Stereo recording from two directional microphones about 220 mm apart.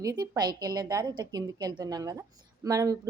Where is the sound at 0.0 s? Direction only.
15° right (ahead or behind).